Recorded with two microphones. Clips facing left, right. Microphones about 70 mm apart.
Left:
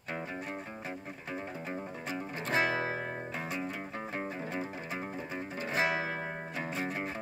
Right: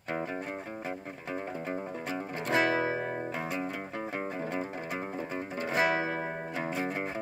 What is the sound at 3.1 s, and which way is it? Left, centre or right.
Music, centre.